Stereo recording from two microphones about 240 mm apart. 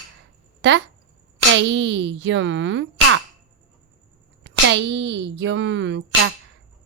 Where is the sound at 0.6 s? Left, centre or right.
Right.